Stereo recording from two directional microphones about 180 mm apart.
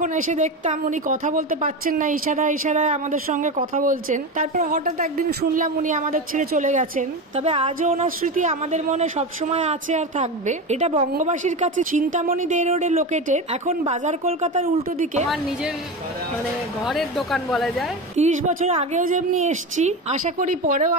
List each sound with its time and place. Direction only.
0.0 s a woman's voice: 40° right (ahead or behind)
15.2 s a woman's voice: centre (ahead or behind)
16.8 s a woman's voice: centre (ahead or behind)
18.1 s a woman's voice: 40° right (ahead or behind)